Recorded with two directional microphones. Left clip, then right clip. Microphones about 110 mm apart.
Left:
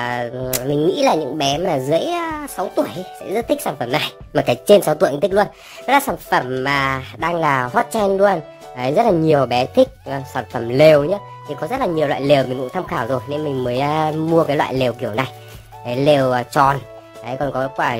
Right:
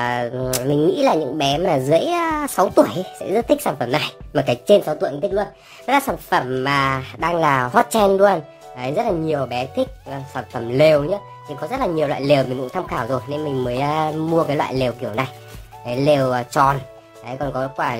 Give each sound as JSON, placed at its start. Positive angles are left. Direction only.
{"t": 0.0, "sound": "speech", "side_deg": 5}
{"t": 2.5, "sound": "speech", "side_deg": -30}
{"t": 3.3, "sound": "speech", "side_deg": -5}
{"t": 4.0, "sound": "speech", "side_deg": 20}
{"t": 4.9, "sound": "speech", "side_deg": 50}
{"t": 5.9, "sound": "speech", "side_deg": 20}
{"t": 8.7, "sound": "speech", "side_deg": 45}
{"t": 10.6, "sound": "speech", "side_deg": 30}